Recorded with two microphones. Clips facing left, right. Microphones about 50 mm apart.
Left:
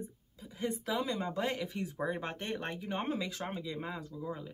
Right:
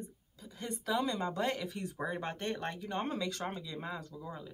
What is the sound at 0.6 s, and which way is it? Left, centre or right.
Speech, centre.